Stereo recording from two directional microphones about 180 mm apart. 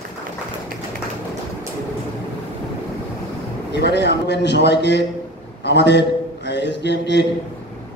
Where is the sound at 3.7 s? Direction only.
70° left (ahead or behind).